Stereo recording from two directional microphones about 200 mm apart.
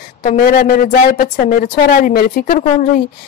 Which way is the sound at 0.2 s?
45° left (ahead or behind).